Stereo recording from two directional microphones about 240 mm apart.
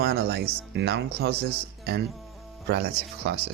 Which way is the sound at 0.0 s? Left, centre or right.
Right.